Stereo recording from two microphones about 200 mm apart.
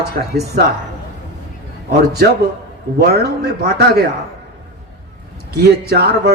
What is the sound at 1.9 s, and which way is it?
A man's voice, 55° right (ahead or behind).